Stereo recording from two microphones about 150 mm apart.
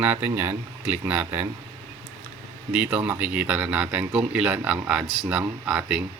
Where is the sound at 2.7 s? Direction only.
10° right (ahead or behind).